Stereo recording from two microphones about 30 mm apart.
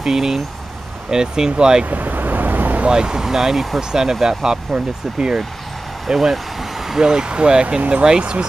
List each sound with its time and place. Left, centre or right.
0.0 s speech: centre
1.9 s vehicle: right
2.9 s speech: right
6.0 s speech: centre
6.3 s vehicle: centre
7.0 s speech: right